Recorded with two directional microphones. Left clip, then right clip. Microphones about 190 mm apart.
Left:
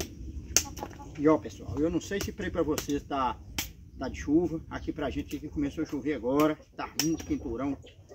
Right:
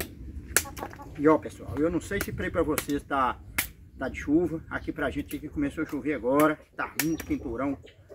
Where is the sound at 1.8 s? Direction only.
Centre (ahead or behind).